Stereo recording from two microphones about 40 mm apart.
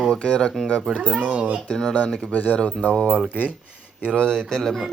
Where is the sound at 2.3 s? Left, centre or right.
Left.